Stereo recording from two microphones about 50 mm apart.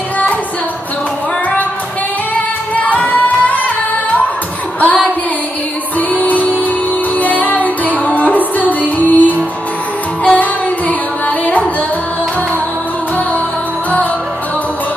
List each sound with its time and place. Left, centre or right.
2.7 s music: left
4.7 s music: left